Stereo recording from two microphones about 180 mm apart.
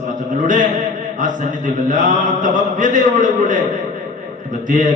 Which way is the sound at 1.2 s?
45° right (ahead or behind).